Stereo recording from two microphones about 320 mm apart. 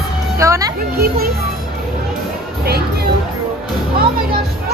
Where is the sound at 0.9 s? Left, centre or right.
Right.